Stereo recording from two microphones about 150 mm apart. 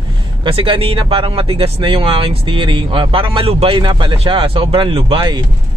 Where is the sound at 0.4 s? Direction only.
35° right (ahead or behind).